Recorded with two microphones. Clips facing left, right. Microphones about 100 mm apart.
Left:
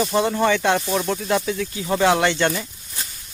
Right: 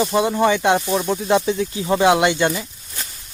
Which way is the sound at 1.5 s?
25° right (ahead or behind).